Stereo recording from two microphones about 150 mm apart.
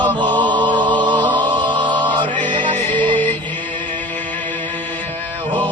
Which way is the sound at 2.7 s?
10° left (ahead or behind).